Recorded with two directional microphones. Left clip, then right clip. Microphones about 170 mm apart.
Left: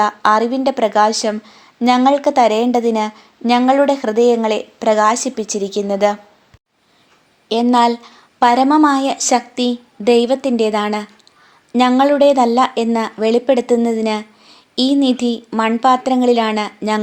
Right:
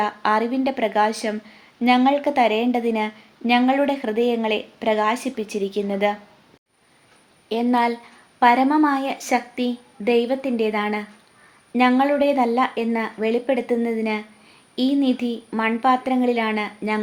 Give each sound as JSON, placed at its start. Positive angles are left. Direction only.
{"t": 0.0, "sound": "a woman's voice", "side_deg": 25}
{"t": 7.4, "sound": "speech", "side_deg": 35}